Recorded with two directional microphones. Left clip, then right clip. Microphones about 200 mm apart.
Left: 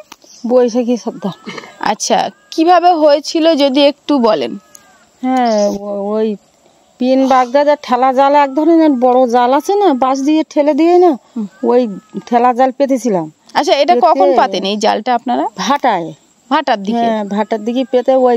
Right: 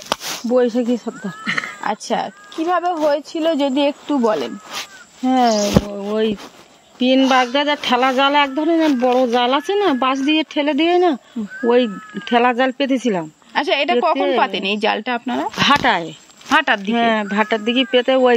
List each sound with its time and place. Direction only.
0.6 s speech: 55° left (ahead or behind)
1.8 s speech: 70° left (ahead or behind)
5.2 s speech: 45° left (ahead or behind); by 18.3 s 60° left (ahead or behind)